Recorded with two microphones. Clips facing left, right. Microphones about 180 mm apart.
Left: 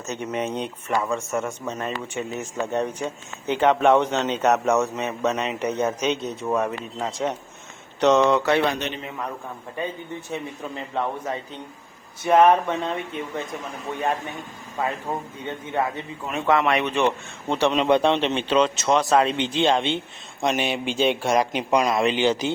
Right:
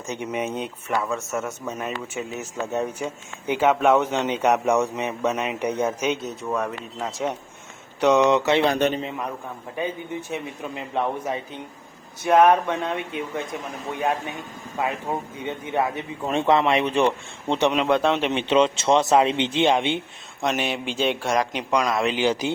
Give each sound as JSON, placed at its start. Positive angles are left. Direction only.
{"t": 0.1, "sound": "speech", "side_deg": -10}
{"t": 6.4, "sound": "a man's voice", "side_deg": 5}
{"t": 8.0, "sound": "speech", "side_deg": -15}
{"t": 8.7, "sound": "a man's voice", "side_deg": -45}
{"t": 9.0, "sound": "speech", "side_deg": -20}
{"t": 10.9, "sound": "speech", "side_deg": -15}
{"t": 12.2, "sound": "a man's voice", "side_deg": 0}
{"t": 14.8, "sound": "speech", "side_deg": -15}
{"t": 16.2, "sound": "speech", "side_deg": -25}
{"t": 17.7, "sound": "a man's voice", "side_deg": 0}
{"t": 18.3, "sound": "speech", "side_deg": -20}
{"t": 20.4, "sound": "a man's voice", "side_deg": 0}